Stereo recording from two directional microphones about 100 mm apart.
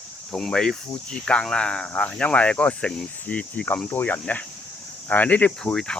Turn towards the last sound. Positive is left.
turn(degrees=10)  # may be behind; listen again after turning